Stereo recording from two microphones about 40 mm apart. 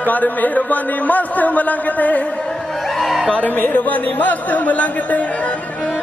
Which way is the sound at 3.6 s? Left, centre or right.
Left.